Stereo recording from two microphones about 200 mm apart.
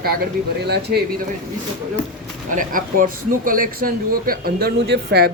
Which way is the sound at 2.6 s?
40° right (ahead or behind).